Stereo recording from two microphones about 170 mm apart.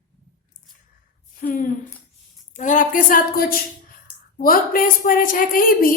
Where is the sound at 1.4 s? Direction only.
55° left (ahead or behind).